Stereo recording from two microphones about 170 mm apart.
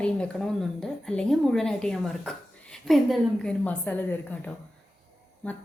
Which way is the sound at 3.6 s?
10° left (ahead or behind).